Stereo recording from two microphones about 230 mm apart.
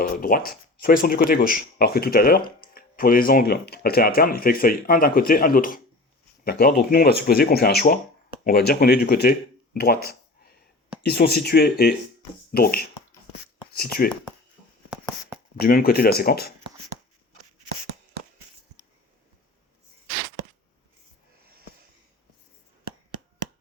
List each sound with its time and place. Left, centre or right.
0.0 s speech: left
9.8 s a sound: left
11.0 s speech: left
14.8 s writing: centre
15.5 s speech: left